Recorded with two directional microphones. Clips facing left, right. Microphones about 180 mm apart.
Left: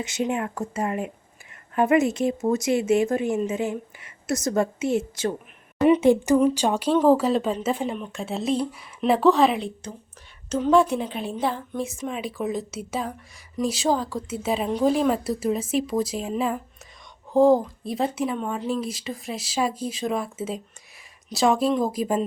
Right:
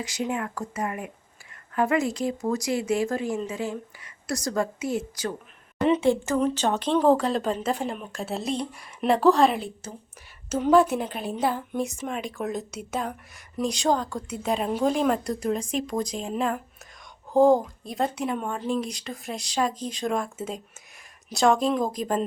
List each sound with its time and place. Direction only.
0.0 s a woman's voice: 25° left (ahead or behind); by 22.3 s 5° left (ahead or behind)